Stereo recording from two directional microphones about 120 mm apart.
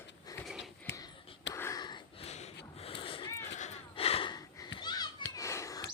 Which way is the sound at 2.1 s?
65° left (ahead or behind).